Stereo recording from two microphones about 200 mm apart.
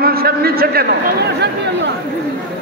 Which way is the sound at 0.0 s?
50° right (ahead or behind).